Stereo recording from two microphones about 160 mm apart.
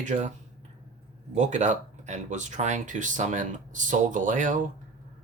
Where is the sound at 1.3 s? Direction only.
45° right (ahead or behind).